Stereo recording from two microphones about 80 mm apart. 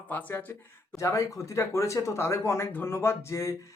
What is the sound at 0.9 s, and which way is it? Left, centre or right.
Speech, left.